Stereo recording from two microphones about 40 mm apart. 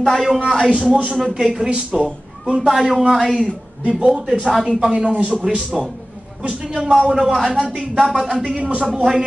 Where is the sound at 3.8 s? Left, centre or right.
Right.